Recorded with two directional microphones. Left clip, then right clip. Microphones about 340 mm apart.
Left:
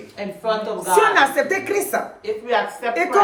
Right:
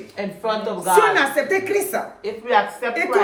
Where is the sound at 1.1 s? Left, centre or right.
Centre.